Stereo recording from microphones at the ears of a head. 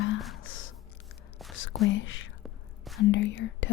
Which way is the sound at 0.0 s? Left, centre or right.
Left.